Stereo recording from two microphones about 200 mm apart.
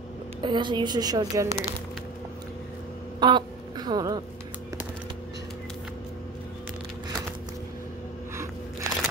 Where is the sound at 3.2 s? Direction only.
20° right (ahead or behind).